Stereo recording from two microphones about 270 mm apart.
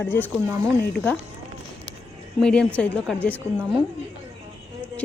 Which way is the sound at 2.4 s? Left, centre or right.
Centre.